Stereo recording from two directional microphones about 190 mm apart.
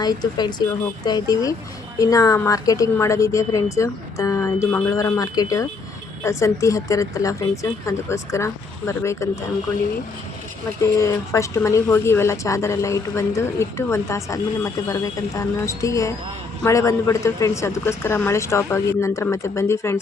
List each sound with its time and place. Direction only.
0.0 s speech: 20° left (ahead or behind)
10.8 s speech: 15° left (ahead or behind)